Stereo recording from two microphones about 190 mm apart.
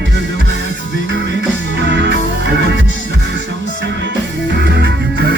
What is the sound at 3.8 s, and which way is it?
Music, 70° right (ahead or behind).